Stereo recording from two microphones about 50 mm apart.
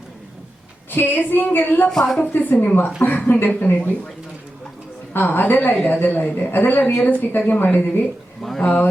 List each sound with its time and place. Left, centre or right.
0.9 s a woman's voice: left
1.9 s speech: centre
2.2 s speech: left
5.1 s speech: left
8.5 s speech: left